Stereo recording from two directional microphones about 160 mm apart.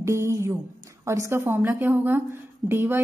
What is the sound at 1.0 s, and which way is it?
A woman's voice, 20° right (ahead or behind).